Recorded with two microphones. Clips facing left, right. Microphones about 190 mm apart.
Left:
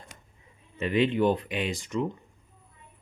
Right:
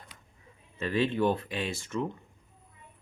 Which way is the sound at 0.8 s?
15° left (ahead or behind).